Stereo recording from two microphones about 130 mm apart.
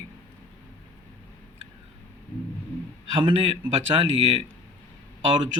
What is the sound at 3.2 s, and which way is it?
A man's voice, 40° right (ahead or behind).